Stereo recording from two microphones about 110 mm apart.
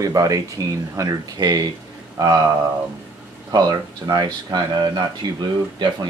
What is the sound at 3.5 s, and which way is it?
Speech, 35° right (ahead or behind).